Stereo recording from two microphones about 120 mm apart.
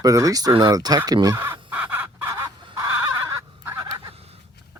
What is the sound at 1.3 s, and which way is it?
Chicken, 20° right (ahead or behind).